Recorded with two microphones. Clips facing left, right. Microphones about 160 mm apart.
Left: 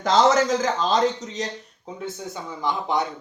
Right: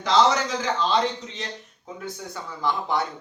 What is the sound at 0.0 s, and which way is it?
A man's voice, 45° left (ahead or behind).